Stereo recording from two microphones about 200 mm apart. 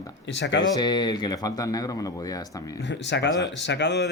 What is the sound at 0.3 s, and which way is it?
Speech, 60° left (ahead or behind).